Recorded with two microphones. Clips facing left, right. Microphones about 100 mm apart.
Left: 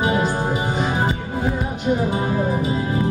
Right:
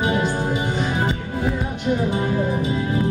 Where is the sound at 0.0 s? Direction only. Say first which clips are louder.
Left 1 dB; 15° left (ahead or behind).